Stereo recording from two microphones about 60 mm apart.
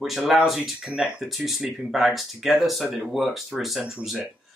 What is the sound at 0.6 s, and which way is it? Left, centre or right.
Speech, centre.